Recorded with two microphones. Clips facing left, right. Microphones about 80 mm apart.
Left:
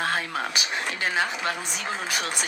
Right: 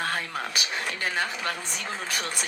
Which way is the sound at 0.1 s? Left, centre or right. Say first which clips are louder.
Left 3 dB; left.